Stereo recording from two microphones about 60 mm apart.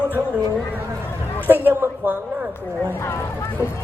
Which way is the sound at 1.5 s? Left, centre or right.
Right.